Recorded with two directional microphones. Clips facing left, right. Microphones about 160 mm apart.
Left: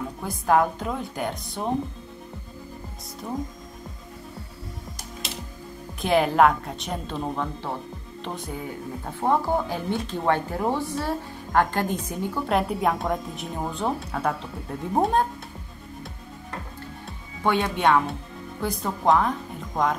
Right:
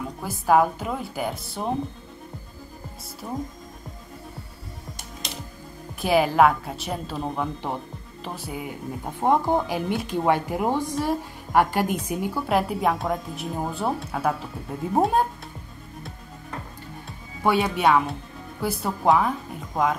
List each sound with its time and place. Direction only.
0.2 s a woman's voice: 5° right (ahead or behind)
3.2 s a woman's voice: 5° right (ahead or behind)
5.9 s a woman's voice: 5° right (ahead or behind)
7.6 s speech: 15° right (ahead or behind)
8.2 s a woman's voice: 5° right (ahead or behind)
17.4 s a woman's voice: 10° right (ahead or behind)